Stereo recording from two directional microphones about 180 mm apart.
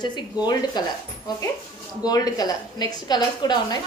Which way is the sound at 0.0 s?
25° left (ahead or behind).